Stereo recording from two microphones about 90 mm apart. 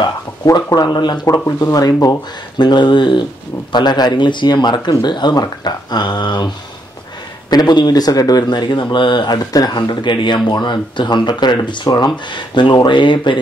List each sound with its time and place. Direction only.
0.0 s speech: 45° left (ahead or behind)
1.6 s speech: 40° left (ahead or behind)
2.6 s speech: 55° left (ahead or behind)